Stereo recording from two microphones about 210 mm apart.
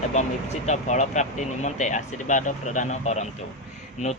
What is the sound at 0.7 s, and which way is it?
Speech, 35° left (ahead or behind).